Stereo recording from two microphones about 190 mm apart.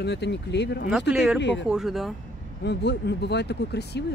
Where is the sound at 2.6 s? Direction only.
60° left (ahead or behind).